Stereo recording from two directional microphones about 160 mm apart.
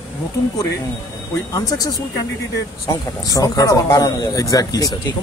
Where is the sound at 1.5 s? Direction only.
20° left (ahead or behind).